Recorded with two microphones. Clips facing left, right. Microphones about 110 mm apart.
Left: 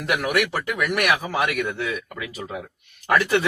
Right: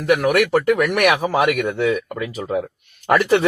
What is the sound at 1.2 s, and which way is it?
Speech, 35° right (ahead or behind).